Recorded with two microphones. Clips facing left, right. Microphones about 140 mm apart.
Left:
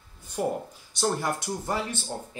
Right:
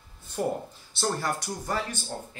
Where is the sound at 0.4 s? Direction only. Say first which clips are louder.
Left 1 dB; 10° left (ahead or behind).